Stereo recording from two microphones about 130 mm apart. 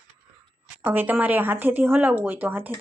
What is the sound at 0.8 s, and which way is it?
Speech, 15° right (ahead or behind).